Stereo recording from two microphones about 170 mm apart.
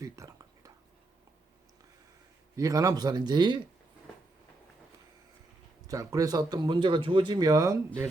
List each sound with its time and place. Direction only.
0.0 s a sound: 20° right (ahead or behind)
2.6 s speech: 20° right (ahead or behind)
5.9 s speech: 20° right (ahead or behind)